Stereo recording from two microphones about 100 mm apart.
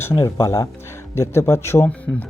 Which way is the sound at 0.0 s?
25° left (ahead or behind).